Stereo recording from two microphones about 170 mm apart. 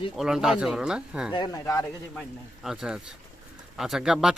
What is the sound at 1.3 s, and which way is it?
Speech, 20° left (ahead or behind).